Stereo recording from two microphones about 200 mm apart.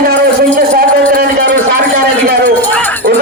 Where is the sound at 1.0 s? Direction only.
50° right (ahead or behind).